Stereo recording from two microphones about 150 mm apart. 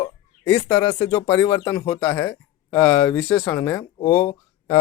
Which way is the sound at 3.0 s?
5° left (ahead or behind).